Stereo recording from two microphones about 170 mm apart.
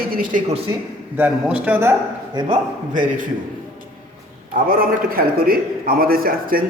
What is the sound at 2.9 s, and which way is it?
Speech, 50° right (ahead or behind).